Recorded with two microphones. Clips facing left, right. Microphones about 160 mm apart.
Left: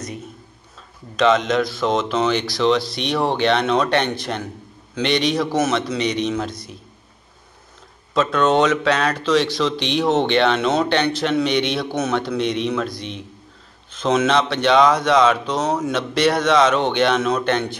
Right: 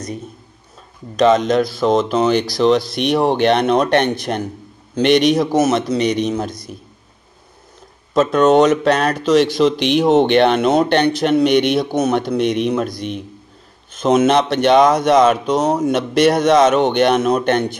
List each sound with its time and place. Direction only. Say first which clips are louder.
1.1 s speech: right 4 dB; 40° right (ahead or behind)
8.1 s speech: right 5 dB; 45° right (ahead or behind)